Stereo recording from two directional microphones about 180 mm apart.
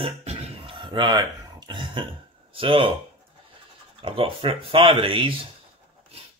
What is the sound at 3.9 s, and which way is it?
Speech, 30° right (ahead or behind).